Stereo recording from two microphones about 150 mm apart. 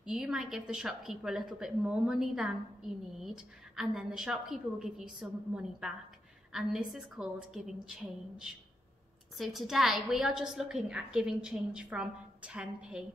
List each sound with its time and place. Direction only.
0.0 s a woman's voice: 5° right (ahead or behind)